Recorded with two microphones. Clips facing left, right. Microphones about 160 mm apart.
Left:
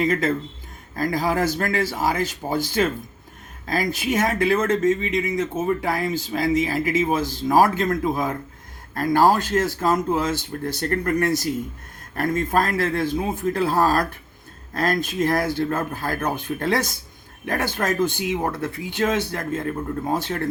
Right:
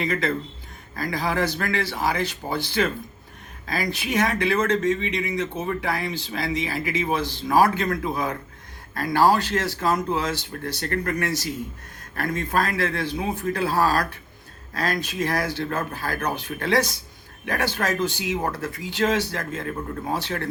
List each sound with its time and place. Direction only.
0.0 s speech: 45° left (ahead or behind)